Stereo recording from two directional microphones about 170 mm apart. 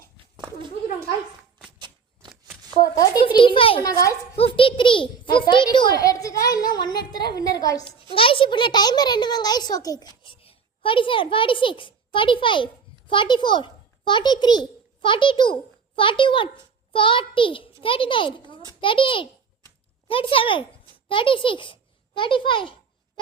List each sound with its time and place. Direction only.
2.9 s a sound: 25° left (ahead or behind)
4.4 s a child's voice: 30° left (ahead or behind)
10.2 s a child's voice: 30° left (ahead or behind)